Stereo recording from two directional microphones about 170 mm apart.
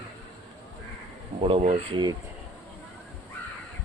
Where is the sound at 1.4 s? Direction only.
35° right (ahead or behind).